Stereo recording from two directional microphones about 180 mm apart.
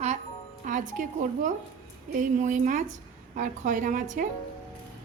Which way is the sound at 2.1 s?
45° right (ahead or behind).